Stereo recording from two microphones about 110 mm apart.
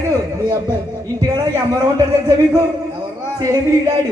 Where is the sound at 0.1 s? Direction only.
30° right (ahead or behind).